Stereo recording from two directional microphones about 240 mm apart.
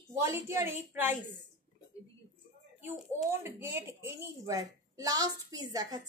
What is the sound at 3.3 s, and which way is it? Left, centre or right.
A woman's voice, centre.